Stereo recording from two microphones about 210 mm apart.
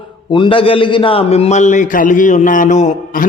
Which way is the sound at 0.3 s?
25° left (ahead or behind).